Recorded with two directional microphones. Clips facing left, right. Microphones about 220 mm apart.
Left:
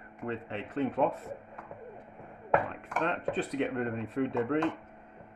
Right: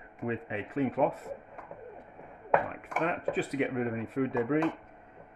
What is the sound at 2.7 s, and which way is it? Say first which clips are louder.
Speech: right 1 dB; 10° right (ahead or behind).